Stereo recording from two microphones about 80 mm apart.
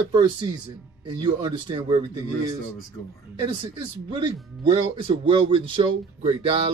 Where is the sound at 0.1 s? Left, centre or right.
Right.